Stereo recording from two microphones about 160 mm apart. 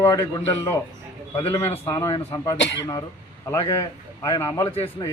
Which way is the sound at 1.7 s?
15° left (ahead or behind).